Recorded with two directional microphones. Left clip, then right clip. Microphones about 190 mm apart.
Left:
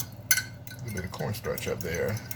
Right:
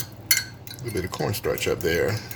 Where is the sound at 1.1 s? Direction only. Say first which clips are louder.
Right 6 dB; 60° right (ahead or behind).